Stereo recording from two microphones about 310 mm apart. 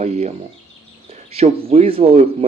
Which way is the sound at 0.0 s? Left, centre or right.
Right.